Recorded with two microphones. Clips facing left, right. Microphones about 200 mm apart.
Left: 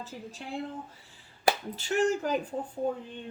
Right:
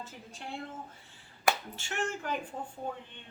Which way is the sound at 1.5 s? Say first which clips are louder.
Left 4 dB; 35° left (ahead or behind).